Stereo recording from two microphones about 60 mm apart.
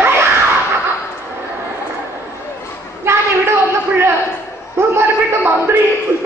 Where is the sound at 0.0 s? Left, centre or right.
Right.